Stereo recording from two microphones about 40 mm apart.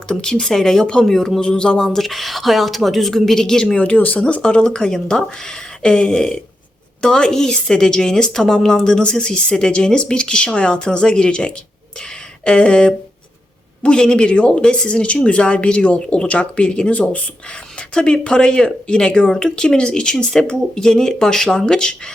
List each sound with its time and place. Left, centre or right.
0.1 s speech: left
1.4 s a woman's voice: left
2.0 s a woman's voice: centre
3.9 s speech: left
4.2 s a woman's voice: left
11.9 s a sound: left
13.8 s a woman's voice: centre
16.9 s a woman's voice: left